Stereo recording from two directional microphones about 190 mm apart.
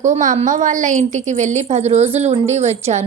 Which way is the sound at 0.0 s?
40° right (ahead or behind).